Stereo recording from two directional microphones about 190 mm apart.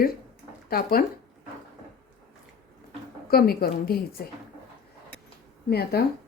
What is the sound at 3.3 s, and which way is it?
Speech, 50° left (ahead or behind).